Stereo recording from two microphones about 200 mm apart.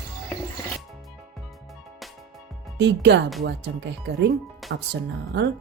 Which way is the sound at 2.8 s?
60° right (ahead or behind).